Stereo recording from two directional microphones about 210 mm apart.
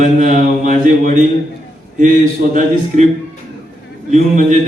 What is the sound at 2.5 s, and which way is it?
Mantra, 35° right (ahead or behind).